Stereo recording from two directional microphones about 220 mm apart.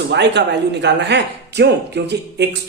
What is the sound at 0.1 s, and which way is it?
Speech, 50° right (ahead or behind).